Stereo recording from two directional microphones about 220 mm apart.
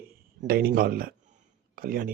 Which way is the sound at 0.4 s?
40° right (ahead or behind).